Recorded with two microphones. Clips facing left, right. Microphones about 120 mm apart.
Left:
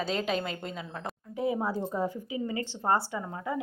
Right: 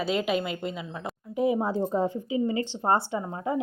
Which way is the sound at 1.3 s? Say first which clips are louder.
Right 5 dB; 20° right (ahead or behind).